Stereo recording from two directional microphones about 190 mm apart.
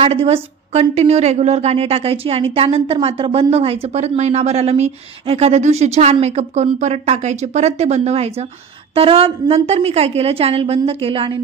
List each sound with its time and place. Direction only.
0.0 s a woman's voice: 30° right (ahead or behind)